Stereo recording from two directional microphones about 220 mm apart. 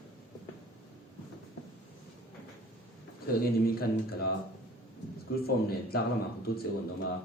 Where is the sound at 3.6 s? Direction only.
45° left (ahead or behind).